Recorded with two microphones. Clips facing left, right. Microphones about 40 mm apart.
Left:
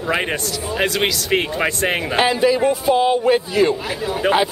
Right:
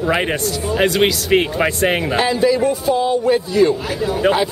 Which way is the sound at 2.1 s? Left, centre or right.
Centre.